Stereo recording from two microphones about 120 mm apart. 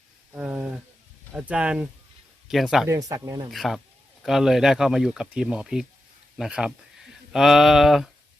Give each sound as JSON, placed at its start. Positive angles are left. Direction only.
{"t": 0.3, "sound": "a sound", "side_deg": -10}
{"t": 1.3, "sound": "speech", "side_deg": -10}
{"t": 2.8, "sound": "speech", "side_deg": -25}
{"t": 3.5, "sound": "speech", "side_deg": 0}